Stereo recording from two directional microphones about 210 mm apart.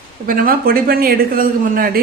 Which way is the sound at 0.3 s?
45° right (ahead or behind).